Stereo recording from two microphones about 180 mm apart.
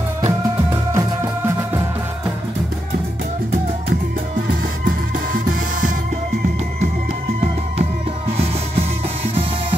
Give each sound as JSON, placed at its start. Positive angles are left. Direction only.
{"t": 0.9, "sound": "music", "side_deg": -15}
{"t": 5.3, "sound": "music", "side_deg": -50}